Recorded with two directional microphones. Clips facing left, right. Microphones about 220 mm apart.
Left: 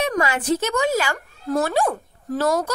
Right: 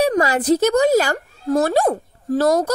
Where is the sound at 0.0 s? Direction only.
35° right (ahead or behind).